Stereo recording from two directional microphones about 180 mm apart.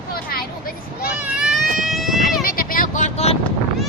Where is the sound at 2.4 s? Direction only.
50° left (ahead or behind); by 3.4 s 35° left (ahead or behind).